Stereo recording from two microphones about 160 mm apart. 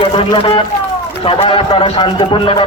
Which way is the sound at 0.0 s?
30° left (ahead or behind).